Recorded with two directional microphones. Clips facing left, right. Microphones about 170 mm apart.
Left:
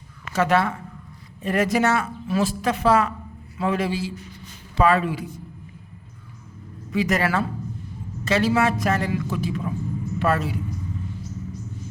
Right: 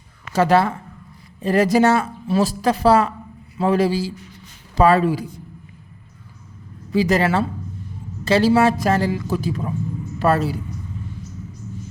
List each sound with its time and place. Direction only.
0.3 s speech: 35° right (ahead or behind)
6.9 s speech: 30° right (ahead or behind)